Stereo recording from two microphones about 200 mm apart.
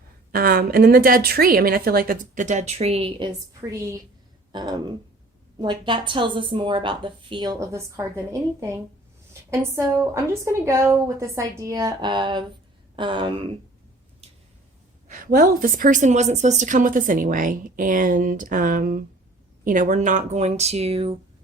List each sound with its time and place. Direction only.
0.3 s a woman's voice: 50° right (ahead or behind); by 3.2 s 25° right (ahead or behind)
3.7 s a woman's voice: 15° right (ahead or behind)
15.0 s speech: 40° right (ahead or behind)